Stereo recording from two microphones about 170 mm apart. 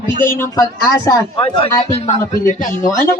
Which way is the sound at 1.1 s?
25° left (ahead or behind).